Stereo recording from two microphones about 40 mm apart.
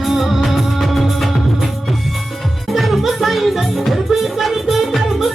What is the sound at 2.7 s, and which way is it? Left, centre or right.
Music, centre.